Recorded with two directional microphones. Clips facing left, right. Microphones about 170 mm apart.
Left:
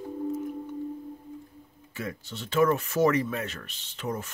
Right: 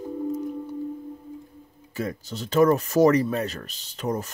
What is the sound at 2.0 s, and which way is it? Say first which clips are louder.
Speech: right 6 dB; 40° right (ahead or behind).